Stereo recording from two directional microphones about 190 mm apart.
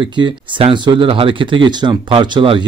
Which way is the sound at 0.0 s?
25° right (ahead or behind).